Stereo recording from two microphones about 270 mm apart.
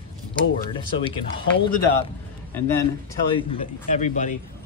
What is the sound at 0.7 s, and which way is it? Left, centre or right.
Speech, centre.